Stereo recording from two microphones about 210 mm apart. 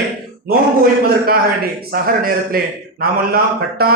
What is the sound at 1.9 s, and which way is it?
A man's voice, 45° right (ahead or behind).